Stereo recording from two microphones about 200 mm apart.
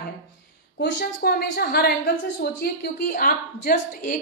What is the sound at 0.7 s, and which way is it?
A woman's voice, 50° left (ahead or behind).